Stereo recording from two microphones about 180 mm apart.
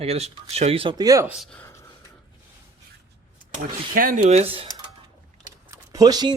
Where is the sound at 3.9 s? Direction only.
50° right (ahead or behind); by 4.7 s 30° right (ahead or behind).